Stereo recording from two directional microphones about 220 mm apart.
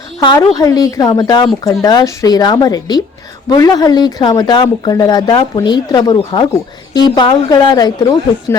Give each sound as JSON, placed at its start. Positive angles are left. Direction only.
{"t": 0.2, "sound": "a woman's voice", "side_deg": 15}